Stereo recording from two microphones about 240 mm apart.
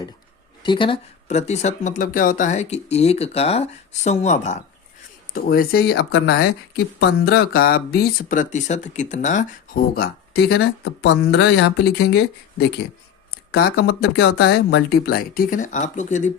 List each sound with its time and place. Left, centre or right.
0.6 s speech: centre